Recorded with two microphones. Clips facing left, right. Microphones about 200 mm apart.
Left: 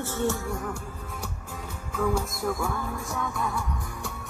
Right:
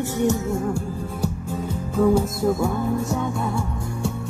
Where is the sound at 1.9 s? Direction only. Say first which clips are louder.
Right 9 dB; 30° right (ahead or behind).